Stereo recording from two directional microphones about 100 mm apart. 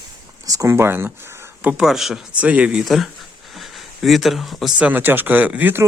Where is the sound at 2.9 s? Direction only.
Centre (ahead or behind).